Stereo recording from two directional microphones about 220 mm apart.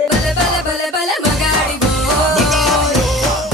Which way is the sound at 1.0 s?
Centre (ahead or behind).